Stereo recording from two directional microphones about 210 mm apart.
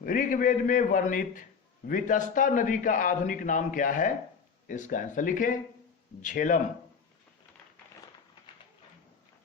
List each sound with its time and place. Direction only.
0.0 s a man's voice: 40° left (ahead or behind)